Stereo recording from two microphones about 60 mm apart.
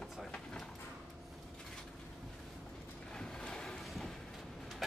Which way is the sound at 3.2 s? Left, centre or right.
Centre.